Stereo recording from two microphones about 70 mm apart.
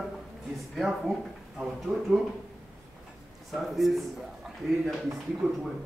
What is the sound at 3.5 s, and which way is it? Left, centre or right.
Speech, centre.